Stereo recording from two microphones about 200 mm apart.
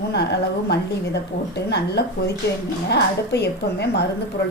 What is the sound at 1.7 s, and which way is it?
A woman's voice, 55° left (ahead or behind).